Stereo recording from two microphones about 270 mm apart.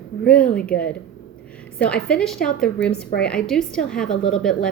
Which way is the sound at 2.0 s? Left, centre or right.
Centre.